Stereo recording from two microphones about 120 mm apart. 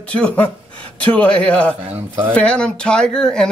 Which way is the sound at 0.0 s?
10° left (ahead or behind).